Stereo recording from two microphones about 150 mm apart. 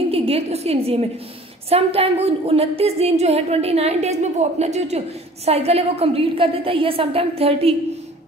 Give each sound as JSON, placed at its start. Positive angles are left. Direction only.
{"t": 0.1, "sound": "a woman's voice", "side_deg": -40}